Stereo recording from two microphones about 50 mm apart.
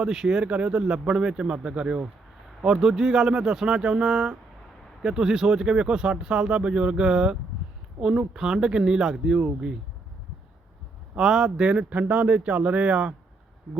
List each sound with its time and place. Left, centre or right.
0.0 s speech: centre
11.2 s speech: centre
11.6 s speech: right